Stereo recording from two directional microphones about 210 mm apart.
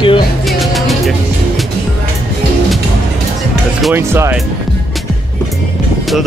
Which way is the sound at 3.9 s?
10° right (ahead or behind).